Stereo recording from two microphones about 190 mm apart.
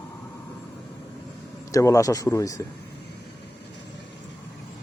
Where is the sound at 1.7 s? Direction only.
15° left (ahead or behind).